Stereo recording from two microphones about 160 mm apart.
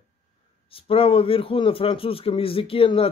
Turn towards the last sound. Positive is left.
turn(degrees=35)  # may be behind; listen again after turning